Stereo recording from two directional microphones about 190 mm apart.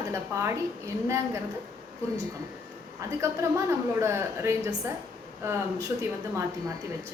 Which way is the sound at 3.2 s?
15° right (ahead or behind).